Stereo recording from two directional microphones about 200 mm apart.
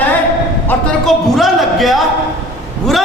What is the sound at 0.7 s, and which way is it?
A man's voice, centre (ahead or behind).